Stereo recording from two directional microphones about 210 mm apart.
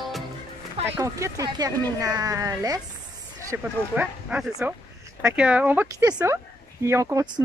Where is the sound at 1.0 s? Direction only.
15° right (ahead or behind).